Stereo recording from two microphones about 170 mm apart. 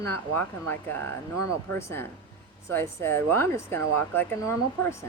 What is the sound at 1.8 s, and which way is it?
Speech, 15° left (ahead or behind).